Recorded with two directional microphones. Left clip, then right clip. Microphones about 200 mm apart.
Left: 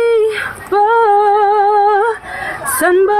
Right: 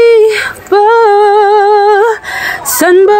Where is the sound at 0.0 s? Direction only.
35° right (ahead or behind).